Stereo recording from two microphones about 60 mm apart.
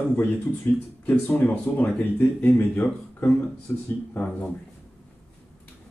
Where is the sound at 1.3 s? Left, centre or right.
Left.